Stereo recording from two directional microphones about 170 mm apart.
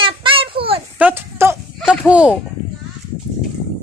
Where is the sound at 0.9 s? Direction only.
10° right (ahead or behind).